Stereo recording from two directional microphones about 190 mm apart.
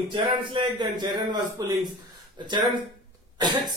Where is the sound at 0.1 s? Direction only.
25° right (ahead or behind).